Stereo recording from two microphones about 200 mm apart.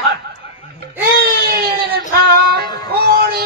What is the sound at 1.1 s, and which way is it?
Baby cry, 55° right (ahead or behind).